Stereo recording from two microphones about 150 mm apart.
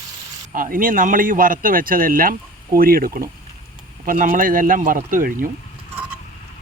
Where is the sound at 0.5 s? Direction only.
70° right (ahead or behind).